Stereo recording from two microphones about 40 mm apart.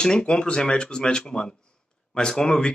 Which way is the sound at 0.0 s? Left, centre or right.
Left.